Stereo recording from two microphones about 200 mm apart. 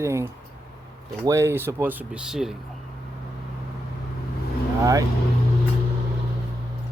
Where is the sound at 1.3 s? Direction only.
15° right (ahead or behind).